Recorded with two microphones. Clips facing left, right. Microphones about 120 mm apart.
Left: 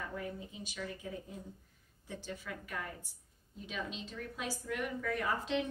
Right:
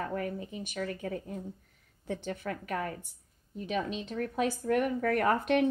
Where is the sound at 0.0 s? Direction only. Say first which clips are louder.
Right 7 dB; 65° right (ahead or behind).